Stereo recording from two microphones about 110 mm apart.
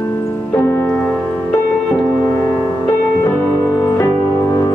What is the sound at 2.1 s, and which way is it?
Music, 30° left (ahead or behind).